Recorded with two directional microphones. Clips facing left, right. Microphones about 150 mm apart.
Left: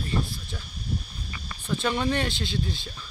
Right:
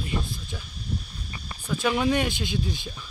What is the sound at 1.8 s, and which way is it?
Speech, 5° right (ahead or behind).